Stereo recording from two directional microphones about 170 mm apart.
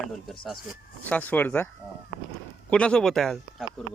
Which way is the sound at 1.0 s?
10° left (ahead or behind).